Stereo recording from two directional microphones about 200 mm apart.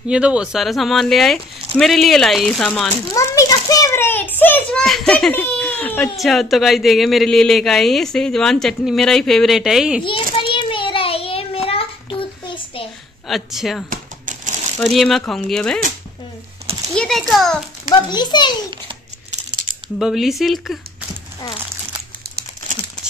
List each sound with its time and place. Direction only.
0.1 s speech: 5° right (ahead or behind)
10.0 s child singing: 25° left (ahead or behind)
13.3 s speech: centre (ahead or behind)
13.8 s typewriter: 40° right (ahead or behind)
14.8 s speech: centre (ahead or behind)
16.9 s speech: 5° left (ahead or behind)
17.9 s a child's voice: 20° left (ahead or behind)
20.0 s speech: centre (ahead or behind)